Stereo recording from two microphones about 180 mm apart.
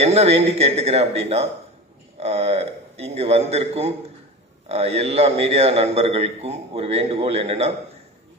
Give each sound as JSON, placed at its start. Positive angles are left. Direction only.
{"t": 0.0, "sound": "a man's voice", "side_deg": -35}